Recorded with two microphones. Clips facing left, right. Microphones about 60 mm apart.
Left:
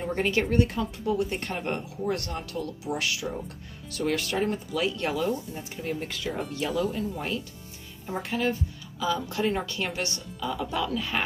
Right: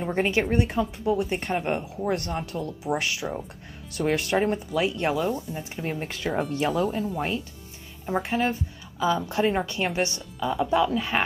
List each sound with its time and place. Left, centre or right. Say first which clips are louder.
0.0 s speech: right 2 dB; right
2.0 s speech: right 3 dB; right
5.8 s speech: even; right